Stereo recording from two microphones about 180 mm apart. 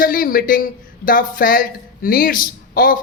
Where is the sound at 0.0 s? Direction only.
50° left (ahead or behind).